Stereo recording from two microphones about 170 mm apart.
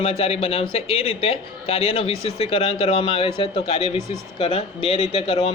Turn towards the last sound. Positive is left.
turn(degrees=35)  # may be behind; listen again after turning